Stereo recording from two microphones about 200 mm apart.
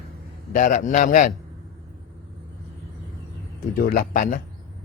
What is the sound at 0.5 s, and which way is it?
Speech, 40° left (ahead or behind).